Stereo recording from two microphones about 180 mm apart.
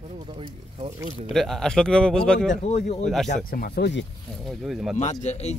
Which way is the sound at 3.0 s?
Centre (ahead or behind).